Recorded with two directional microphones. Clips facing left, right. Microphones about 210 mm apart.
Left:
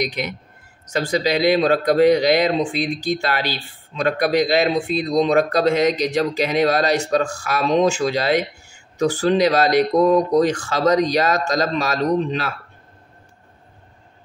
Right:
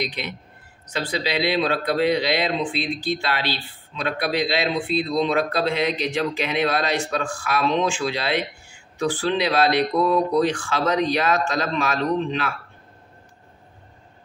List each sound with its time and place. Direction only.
0.0 s a man's voice: 45° left (ahead or behind)